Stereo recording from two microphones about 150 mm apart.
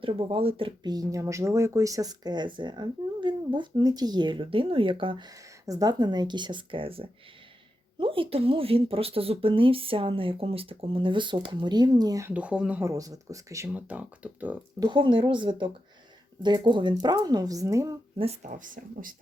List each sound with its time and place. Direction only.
0.0 s speech: 35° right (ahead or behind)
12.3 s speech: 10° right (ahead or behind)
12.8 s speech: 20° right (ahead or behind)
13.7 s speech: 10° right (ahead or behind)
14.8 s speech: 30° right (ahead or behind)
18.2 s speech: 45° right (ahead or behind)
18.5 s speech: 60° right (ahead or behind)